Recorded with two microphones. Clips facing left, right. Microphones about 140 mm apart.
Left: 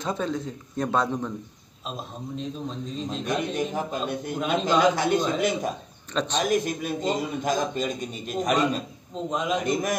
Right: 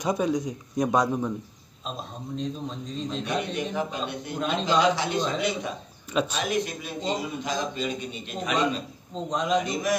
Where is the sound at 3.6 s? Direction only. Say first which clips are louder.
Left 1 dB; 45° left (ahead or behind).